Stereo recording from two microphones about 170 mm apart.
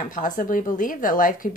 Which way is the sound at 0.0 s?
50° left (ahead or behind).